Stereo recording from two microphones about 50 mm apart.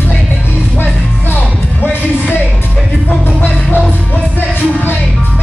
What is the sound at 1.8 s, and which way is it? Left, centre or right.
Music, left.